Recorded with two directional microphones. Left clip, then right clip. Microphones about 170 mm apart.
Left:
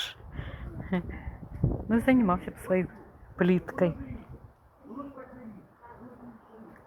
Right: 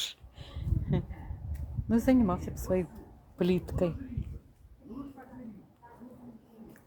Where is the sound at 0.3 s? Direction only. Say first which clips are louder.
Left 1 dB; 20° right (ahead or behind).